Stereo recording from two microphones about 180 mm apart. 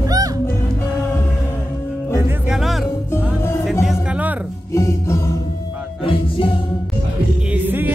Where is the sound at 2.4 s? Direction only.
Centre (ahead or behind).